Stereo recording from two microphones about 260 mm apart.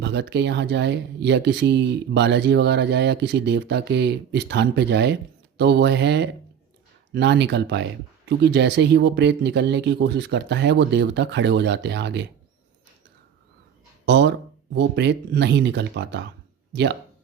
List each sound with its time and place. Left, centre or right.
0.0 s speech: right
14.0 s speech: right